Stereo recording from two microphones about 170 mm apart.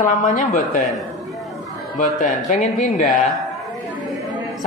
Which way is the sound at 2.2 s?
50° left (ahead or behind).